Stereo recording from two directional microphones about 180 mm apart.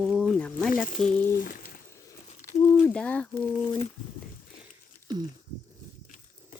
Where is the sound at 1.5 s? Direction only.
50° left (ahead or behind).